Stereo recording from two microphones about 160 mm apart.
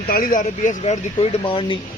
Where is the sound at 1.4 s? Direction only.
30° left (ahead or behind).